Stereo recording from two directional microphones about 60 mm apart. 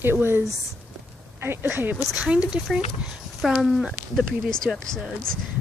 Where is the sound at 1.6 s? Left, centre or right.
Right.